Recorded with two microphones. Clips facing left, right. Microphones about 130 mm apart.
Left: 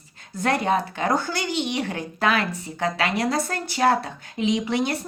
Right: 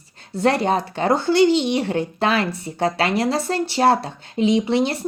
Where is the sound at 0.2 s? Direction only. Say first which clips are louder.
Right 5 dB; 30° right (ahead or behind).